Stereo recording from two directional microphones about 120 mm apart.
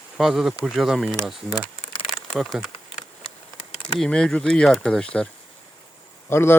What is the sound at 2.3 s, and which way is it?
Speech, centre (ahead or behind).